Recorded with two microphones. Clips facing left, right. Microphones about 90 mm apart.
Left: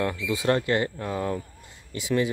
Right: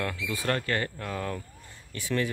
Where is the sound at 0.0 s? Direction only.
20° left (ahead or behind).